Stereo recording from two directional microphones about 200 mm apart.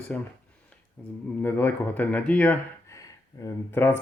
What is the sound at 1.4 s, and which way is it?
Speech, 10° left (ahead or behind).